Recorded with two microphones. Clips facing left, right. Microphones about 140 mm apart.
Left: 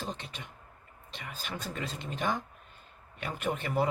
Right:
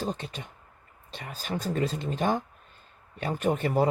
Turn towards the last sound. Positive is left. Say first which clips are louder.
# right 6 dB
turn(degrees=-40)  # may be behind; listen again after turning